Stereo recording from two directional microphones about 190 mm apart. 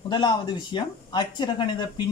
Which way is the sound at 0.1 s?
25° left (ahead or behind).